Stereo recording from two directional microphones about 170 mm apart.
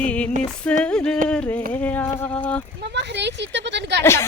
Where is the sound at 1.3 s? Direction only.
5° left (ahead or behind).